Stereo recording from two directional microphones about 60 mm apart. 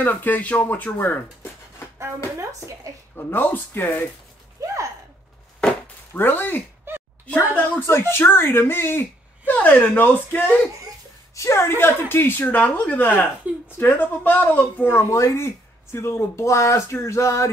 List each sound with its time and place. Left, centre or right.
0.0 s a woman's voice: left
2.3 s a woman's voice: right
3.3 s a woman's voice: left
4.6 s a sound: right
6.1 s a woman's voice: left
6.9 s a sound: right
7.8 s a woman's voice: left
11.3 s a woman's voice: left
15.0 s speech: left